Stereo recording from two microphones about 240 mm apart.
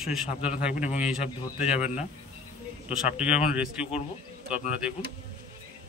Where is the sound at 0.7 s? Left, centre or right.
Left.